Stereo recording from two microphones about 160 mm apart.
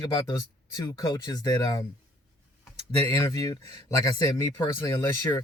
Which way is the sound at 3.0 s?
25° left (ahead or behind).